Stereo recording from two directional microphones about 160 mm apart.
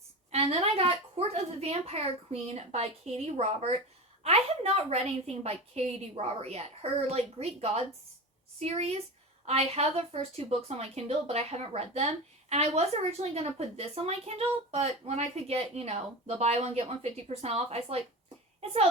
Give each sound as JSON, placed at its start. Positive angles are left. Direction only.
{"t": 0.3, "sound": "a woman's voice", "side_deg": -40}